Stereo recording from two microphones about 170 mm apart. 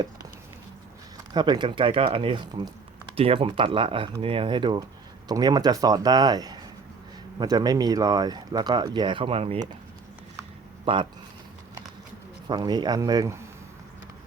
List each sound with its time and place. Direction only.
1.3 s speech: 25° right (ahead or behind)
10.9 s speech: 30° right (ahead or behind)
12.5 s speech: 25° right (ahead or behind)